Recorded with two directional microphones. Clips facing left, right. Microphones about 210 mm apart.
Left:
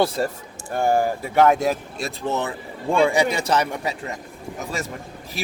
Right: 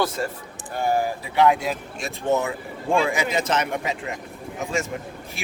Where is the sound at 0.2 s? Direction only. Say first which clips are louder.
Left 4 dB; 35° left (ahead or behind).